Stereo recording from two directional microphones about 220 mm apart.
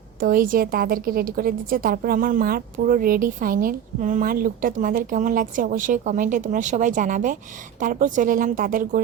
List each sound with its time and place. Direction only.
0.2 s a woman's voice: 40° right (ahead or behind)